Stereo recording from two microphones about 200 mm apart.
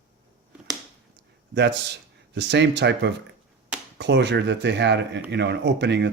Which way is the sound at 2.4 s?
60° right (ahead or behind).